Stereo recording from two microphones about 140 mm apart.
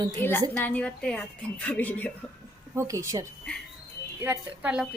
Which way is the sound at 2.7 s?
20° right (ahead or behind).